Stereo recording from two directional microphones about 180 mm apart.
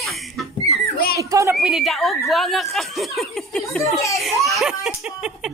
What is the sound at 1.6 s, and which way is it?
A woman's voice, centre (ahead or behind).